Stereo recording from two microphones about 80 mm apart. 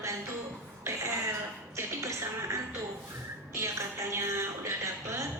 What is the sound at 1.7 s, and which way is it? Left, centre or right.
Music, right.